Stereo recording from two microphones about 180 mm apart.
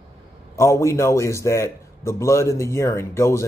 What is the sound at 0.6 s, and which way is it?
Speech, 15° left (ahead or behind).